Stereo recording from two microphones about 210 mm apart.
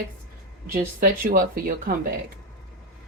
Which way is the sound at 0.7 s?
40° right (ahead or behind).